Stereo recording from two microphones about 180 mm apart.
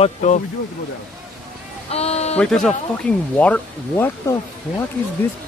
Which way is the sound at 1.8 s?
35° left (ahead or behind).